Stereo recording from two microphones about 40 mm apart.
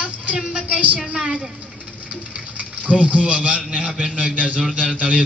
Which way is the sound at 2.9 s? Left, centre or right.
Right.